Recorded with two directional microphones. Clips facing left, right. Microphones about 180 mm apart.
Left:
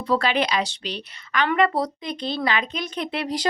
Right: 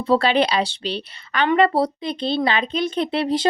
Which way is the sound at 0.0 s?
30° right (ahead or behind).